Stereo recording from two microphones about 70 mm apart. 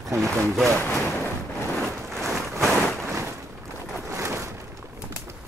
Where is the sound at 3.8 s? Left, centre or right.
Centre.